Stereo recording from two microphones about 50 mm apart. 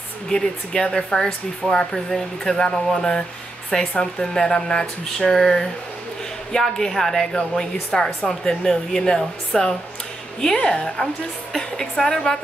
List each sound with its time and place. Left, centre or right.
0.3 s speech: centre